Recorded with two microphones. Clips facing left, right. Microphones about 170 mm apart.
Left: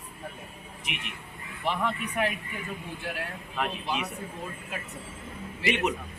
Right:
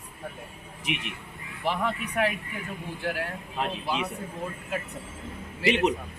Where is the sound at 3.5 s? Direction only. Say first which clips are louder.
Right 1 dB; 30° right (ahead or behind).